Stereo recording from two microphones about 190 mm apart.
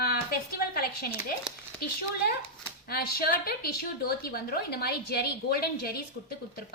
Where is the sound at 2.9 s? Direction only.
55° left (ahead or behind).